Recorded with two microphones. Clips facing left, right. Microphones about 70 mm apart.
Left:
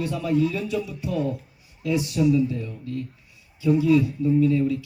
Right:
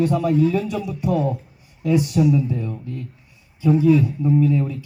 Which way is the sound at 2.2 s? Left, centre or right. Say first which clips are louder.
Right 2 dB; right.